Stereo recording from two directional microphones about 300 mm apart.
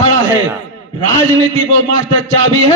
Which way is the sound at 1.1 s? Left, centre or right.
Right.